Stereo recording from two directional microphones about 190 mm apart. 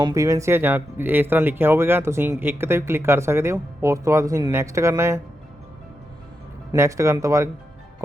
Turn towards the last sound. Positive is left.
turn(degrees=-15)  # may be behind; listen again after turning